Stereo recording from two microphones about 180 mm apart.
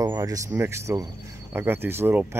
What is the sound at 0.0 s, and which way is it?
Speech, 20° right (ahead or behind).